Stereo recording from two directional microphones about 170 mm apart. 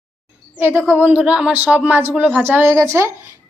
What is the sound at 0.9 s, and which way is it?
A woman's voice, 10° right (ahead or behind).